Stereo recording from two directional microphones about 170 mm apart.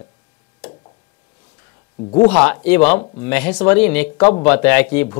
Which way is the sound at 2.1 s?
10° left (ahead or behind).